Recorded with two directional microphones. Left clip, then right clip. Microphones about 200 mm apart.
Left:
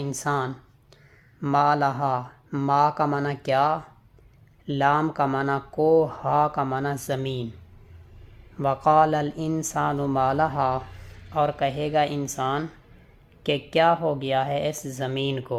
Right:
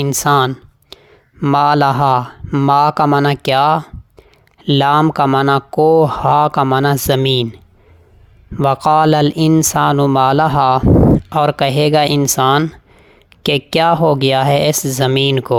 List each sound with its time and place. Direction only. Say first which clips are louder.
0.0 s speech: right 14 dB; 50° right (ahead or behind)
8.5 s speech: right 7 dB; 50° right (ahead or behind)